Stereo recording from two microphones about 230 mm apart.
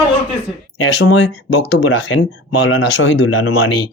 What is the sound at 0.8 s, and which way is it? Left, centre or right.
Speech, left.